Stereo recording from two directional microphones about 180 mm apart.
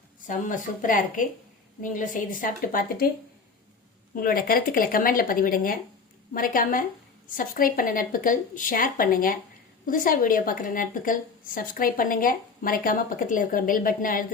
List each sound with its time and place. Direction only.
0.3 s a woman's voice: 45° left (ahead or behind)
4.1 s a woman's voice: 55° left (ahead or behind)